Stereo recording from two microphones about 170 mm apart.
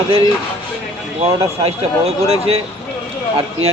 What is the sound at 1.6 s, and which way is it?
A man's voice, 35° right (ahead or behind).